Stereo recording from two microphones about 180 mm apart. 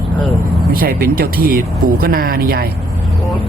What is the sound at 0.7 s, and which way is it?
Speech, 55° right (ahead or behind).